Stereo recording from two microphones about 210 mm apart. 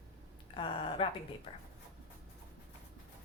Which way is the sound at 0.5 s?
25° left (ahead or behind).